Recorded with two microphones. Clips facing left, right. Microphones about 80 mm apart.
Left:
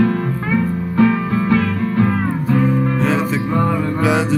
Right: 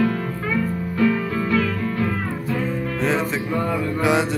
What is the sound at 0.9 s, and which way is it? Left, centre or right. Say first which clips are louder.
Music: left 5 dB; left.